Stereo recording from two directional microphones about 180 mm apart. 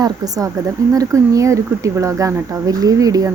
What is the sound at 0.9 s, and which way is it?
Speech, 20° right (ahead or behind).